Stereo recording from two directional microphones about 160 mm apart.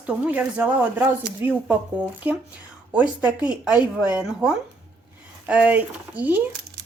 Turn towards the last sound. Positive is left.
turn(degrees=-10)  # may be behind; listen again after turning